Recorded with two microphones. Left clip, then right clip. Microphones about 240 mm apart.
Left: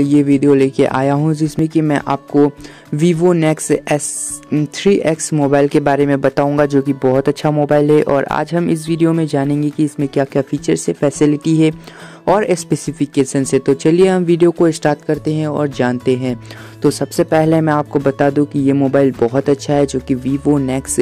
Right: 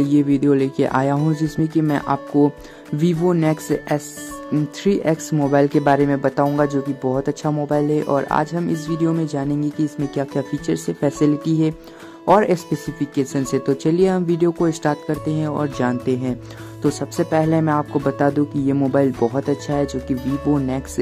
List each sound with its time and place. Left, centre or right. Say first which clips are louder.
0.0 s speech: left 5 dB; left
16.8 s speech: left 6 dB; left